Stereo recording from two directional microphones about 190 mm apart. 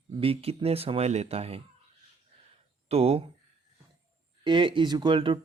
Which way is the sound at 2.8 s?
30° right (ahead or behind).